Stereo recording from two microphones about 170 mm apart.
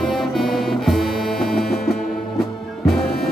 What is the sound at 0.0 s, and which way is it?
Music, centre (ahead or behind).